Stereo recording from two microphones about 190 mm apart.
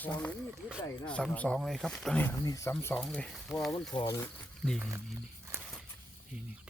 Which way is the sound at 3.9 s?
25° left (ahead or behind).